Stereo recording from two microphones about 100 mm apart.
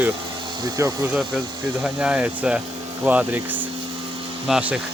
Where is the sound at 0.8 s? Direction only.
30° right (ahead or behind).